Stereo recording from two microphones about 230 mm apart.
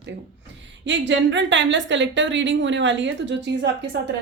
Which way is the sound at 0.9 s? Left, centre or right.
Right.